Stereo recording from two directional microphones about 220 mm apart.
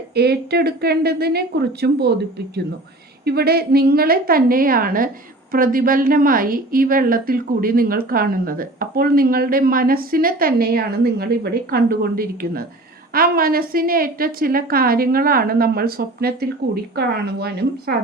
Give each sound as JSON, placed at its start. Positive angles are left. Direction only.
{"t": 0.1, "sound": "a woman's voice", "side_deg": -45}
{"t": 3.2, "sound": "a woman's voice", "side_deg": -45}